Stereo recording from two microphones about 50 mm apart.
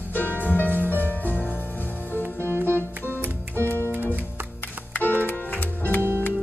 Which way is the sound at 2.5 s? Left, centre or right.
Right.